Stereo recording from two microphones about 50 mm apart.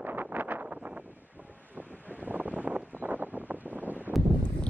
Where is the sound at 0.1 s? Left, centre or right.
Right.